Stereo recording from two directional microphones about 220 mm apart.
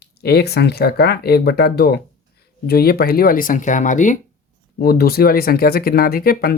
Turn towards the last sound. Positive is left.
turn(degrees=40)  # may be behind; listen again after turning